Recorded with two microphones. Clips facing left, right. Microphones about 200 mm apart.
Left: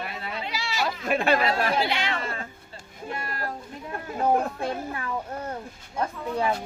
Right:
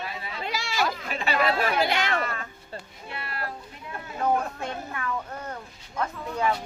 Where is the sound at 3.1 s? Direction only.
45° left (ahead or behind).